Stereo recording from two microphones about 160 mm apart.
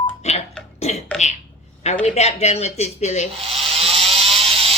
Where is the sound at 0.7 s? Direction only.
45° left (ahead or behind).